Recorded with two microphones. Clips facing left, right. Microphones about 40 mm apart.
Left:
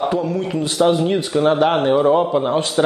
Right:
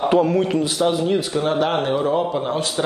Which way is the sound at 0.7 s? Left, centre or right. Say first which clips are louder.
Left 6 dB; centre.